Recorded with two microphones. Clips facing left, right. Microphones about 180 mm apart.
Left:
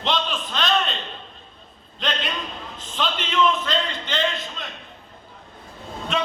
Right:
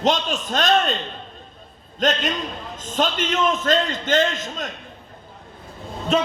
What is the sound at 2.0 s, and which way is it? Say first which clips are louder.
A man's voice: right 6 dB; 45° right (ahead or behind).